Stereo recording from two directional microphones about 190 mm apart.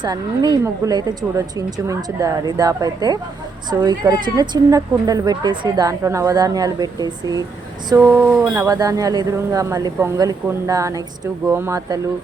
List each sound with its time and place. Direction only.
0.0 s a woman's voice: 20° right (ahead or behind)